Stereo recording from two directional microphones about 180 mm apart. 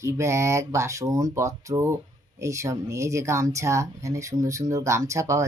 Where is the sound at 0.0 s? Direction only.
15° right (ahead or behind).